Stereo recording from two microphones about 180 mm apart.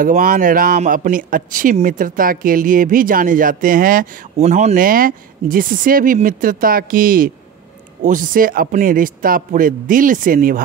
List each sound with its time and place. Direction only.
0.0 s a man's voice: 50° right (ahead or behind)